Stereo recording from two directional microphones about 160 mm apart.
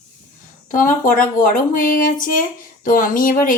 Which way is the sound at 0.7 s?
60° left (ahead or behind).